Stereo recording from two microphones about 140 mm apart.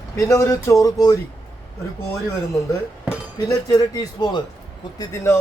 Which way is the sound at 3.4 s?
25° left (ahead or behind).